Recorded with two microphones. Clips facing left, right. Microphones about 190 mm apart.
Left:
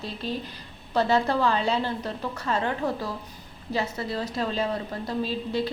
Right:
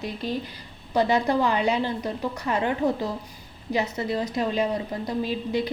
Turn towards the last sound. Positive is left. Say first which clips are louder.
# right 1 dB
turn(degrees=-15)  # may be behind; listen again after turning